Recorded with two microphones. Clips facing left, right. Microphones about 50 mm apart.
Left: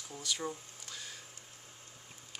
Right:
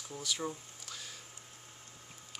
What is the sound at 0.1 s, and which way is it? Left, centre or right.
Speech, centre.